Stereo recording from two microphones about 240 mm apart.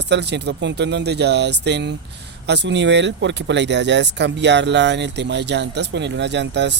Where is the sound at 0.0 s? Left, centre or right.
Right.